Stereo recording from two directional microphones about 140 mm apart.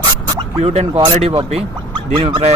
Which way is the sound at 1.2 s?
45° right (ahead or behind).